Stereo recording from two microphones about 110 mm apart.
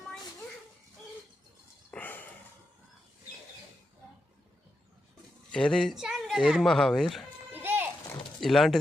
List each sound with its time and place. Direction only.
1.9 s a sound: 15° left (ahead or behind)
5.5 s speech: 5° left (ahead or behind)
7.5 s children playing: 20° right (ahead or behind)
8.4 s speech: centre (ahead or behind)